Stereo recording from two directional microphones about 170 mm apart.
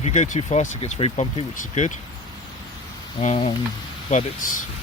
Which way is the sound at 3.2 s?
40° left (ahead or behind).